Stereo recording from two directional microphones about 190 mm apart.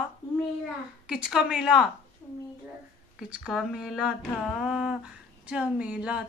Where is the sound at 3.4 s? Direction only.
Centre (ahead or behind).